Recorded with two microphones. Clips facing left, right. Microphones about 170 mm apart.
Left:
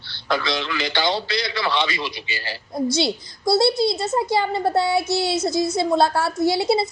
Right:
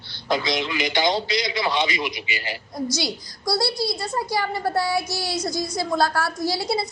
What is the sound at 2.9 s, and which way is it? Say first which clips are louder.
A woman's voice: left 6 dB; 25° left (ahead or behind).